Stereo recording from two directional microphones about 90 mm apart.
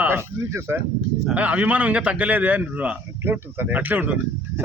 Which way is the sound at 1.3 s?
15° right (ahead or behind).